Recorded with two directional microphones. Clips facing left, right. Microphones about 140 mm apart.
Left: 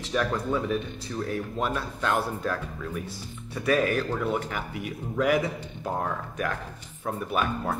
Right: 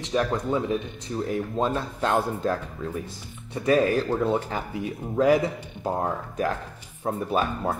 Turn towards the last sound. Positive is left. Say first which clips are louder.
# right 2 dB
turn(degrees=-30)  # may be behind; listen again after turning